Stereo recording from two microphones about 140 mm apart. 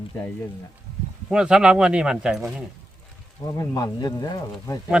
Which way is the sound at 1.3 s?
5° right (ahead or behind).